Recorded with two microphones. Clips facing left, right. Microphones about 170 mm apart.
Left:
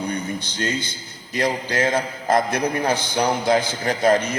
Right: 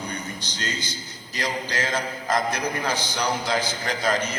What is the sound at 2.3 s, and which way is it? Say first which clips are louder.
A man's voice: left 5 dB; 55° left (ahead or behind).